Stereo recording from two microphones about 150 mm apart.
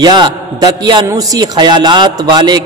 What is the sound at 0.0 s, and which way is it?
A man's voice, 30° right (ahead or behind).